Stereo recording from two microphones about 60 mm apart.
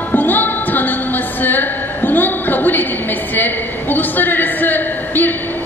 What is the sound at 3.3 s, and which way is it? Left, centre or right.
A man's voice, left.